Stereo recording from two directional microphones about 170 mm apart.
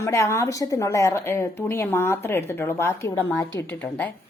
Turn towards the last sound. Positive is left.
turn(degrees=10)  # may be behind; listen again after turning